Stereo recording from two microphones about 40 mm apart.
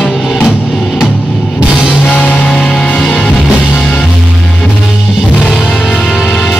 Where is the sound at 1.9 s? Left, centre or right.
Left.